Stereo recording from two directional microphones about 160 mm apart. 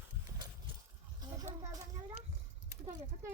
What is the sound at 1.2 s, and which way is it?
Children playing, 25° right (ahead or behind).